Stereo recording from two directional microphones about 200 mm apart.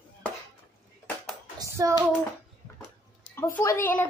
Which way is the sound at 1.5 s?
15° right (ahead or behind).